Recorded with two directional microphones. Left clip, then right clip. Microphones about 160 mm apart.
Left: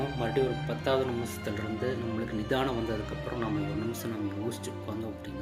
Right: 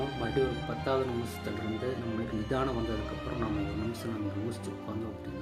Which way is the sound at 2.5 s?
15° right (ahead or behind).